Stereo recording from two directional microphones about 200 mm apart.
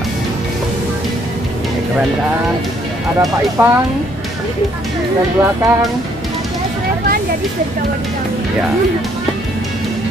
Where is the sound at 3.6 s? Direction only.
10° right (ahead or behind).